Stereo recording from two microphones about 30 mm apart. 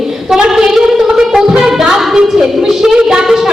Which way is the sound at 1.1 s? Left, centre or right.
Centre.